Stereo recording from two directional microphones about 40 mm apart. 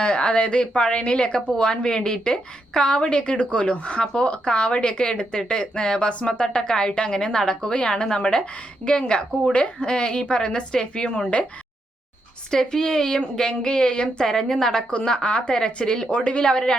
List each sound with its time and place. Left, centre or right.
0.0 s speech: left
9.8 s speech: left
11.1 s speech: left
12.5 s a woman's voice: centre